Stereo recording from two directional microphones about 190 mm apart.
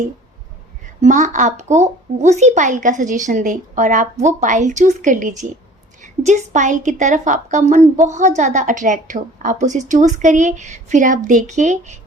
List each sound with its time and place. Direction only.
1.0 s speech: 40° right (ahead or behind)